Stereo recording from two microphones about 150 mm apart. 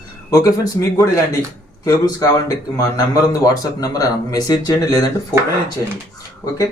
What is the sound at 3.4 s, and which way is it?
Speech, 25° left (ahead or behind).